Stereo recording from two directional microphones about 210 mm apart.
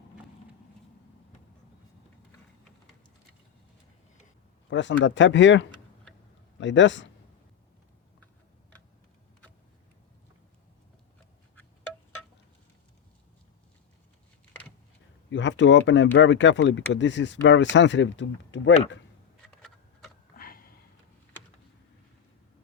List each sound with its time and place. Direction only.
4.7 s speech: 60° left (ahead or behind)
11.5 s wind chime: 10° left (ahead or behind)
15.3 s speech: 60° left (ahead or behind)
20.3 s a sound: 45° left (ahead or behind)